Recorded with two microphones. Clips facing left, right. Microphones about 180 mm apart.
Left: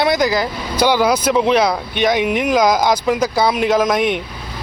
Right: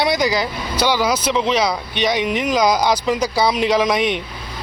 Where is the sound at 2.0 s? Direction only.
50° left (ahead or behind).